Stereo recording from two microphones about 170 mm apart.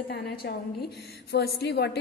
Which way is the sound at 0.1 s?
70° left (ahead or behind).